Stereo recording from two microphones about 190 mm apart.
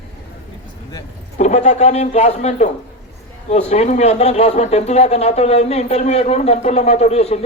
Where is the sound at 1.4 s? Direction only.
35° left (ahead or behind).